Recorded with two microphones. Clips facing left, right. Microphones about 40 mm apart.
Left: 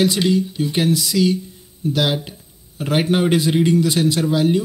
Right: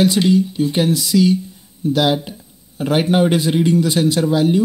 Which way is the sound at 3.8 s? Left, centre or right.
Right.